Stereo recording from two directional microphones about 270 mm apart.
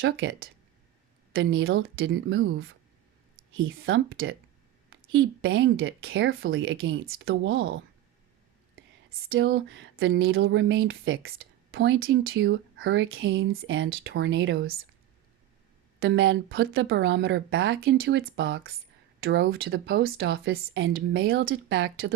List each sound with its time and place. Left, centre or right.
0.0 s speech: right
9.0 s speech: right
16.0 s speech: right